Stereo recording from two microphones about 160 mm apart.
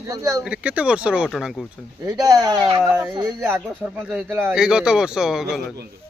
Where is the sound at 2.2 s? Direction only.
25° right (ahead or behind).